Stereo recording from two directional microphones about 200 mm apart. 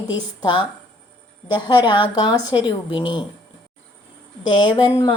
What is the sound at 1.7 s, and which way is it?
Speech, 20° left (ahead or behind).